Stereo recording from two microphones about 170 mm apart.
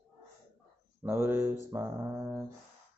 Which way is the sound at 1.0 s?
15° right (ahead or behind).